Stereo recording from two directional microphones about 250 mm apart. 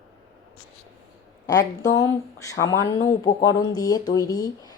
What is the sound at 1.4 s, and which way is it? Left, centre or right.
A woman's voice, centre.